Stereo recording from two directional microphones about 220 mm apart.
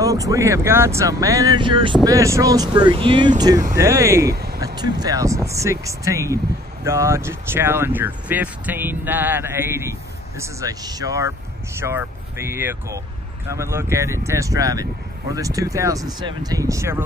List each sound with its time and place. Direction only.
0.0 s speech: 15° right (ahead or behind)
4.3 s speech: 45° right (ahead or behind)
4.7 s speech: 20° right (ahead or behind)